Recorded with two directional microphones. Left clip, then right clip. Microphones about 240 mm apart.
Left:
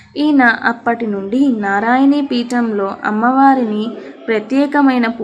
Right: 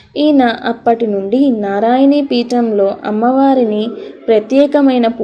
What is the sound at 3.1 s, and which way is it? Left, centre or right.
A woman's voice, centre.